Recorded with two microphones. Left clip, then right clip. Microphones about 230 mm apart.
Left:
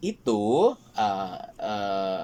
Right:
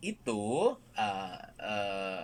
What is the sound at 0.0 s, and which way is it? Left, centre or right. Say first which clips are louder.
Speech: left 9 dB; centre.